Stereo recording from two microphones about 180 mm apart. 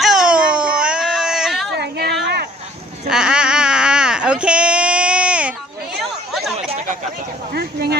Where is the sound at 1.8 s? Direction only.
65° right (ahead or behind).